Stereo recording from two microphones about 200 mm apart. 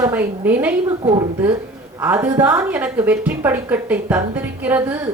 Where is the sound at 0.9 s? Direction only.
20° right (ahead or behind).